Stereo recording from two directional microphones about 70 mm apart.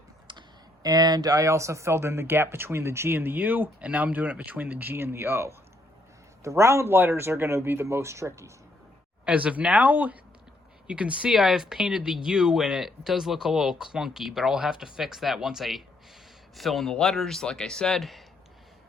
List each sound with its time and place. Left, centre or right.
0.3 s speech: right
9.2 s speech: centre
11.3 s speech: centre